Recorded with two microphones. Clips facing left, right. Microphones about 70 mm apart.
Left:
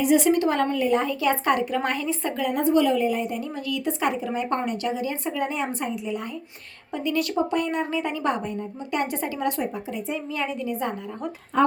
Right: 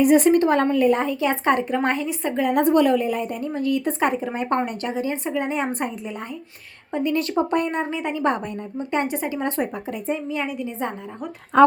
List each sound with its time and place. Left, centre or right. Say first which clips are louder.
0.0 s a woman's voice: right 4 dB; right
1.0 s a woman's voice: right 2 dB; right
2.6 s a woman's voice: right 2 dB; right
5.2 s a woman's voice: right 2 dB; right
5.5 s a woman's voice: right 3 dB; right
7.9 s a woman's voice: right 2 dB; right
9.4 s a woman's voice: right 1 dB; right
10.2 s a woman's voice: right 1 dB; centre
11.5 s speech: right 7 dB; right